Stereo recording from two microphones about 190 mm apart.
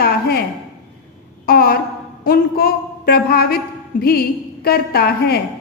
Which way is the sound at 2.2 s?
50° left (ahead or behind).